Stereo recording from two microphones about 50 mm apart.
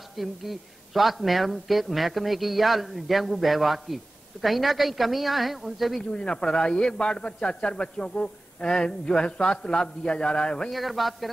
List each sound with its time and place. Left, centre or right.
0.1 s speech: centre
6.1 s a man's voice: centre
10.7 s speech: centre